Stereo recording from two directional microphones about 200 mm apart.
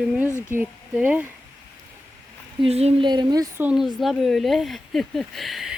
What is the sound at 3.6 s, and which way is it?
Speech, centre (ahead or behind).